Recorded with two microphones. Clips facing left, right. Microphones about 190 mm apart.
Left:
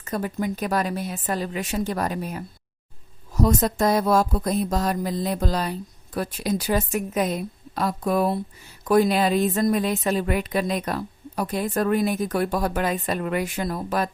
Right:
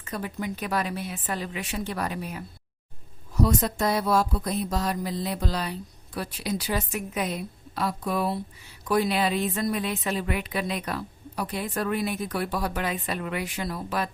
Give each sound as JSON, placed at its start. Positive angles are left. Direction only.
{"t": 0.0, "sound": "a woman's voice", "side_deg": 45}